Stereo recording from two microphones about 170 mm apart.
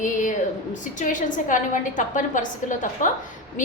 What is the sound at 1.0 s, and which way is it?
A woman's voice, 50° left (ahead or behind).